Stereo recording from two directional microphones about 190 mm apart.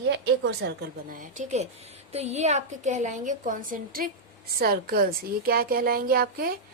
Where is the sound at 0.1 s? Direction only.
65° right (ahead or behind).